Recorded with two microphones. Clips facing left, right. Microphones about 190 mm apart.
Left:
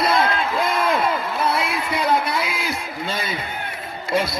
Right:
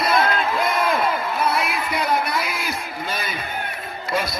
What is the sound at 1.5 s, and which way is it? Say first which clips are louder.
Music: even; 25° left (ahead or behind).